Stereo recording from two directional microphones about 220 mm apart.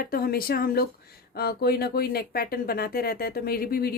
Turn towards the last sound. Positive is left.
turn(degrees=45)  # may be behind; listen again after turning